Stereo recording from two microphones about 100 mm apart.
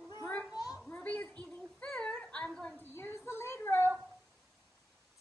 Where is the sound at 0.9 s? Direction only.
15° left (ahead or behind).